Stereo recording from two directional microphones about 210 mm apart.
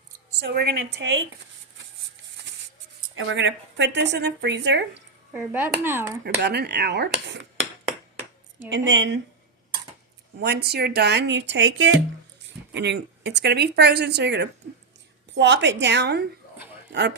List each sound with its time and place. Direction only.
0.4 s speech: 50° right (ahead or behind)
3.2 s speech: 60° right (ahead or behind)
5.3 s speech: 10° right (ahead or behind)
6.2 s speech: 50° right (ahead or behind)
8.7 s speech: 60° right (ahead or behind)
10.4 s speech: 50° right (ahead or behind)